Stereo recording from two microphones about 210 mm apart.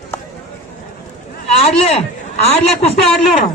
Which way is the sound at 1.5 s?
30° left (ahead or behind).